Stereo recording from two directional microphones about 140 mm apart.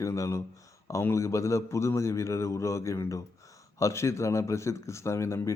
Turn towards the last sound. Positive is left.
turn(degrees=20)  # may be behind; listen again after turning